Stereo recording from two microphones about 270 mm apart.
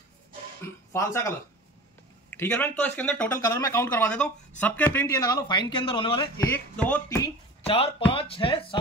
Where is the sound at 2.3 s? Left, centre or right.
Centre.